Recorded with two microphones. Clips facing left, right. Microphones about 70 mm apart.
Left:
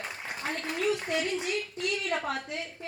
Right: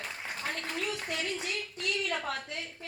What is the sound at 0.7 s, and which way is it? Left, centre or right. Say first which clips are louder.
A woman's voice: left 10 dB; centre.